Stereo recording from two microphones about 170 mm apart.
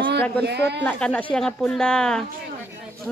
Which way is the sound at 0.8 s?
10° left (ahead or behind).